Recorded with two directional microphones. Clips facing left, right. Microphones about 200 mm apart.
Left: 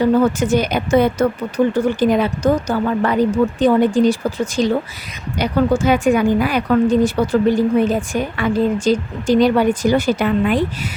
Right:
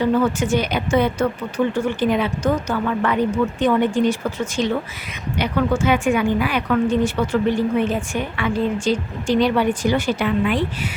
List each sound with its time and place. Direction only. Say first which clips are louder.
0.0 s a woman's voice: left 4 dB; 40° left (ahead or behind)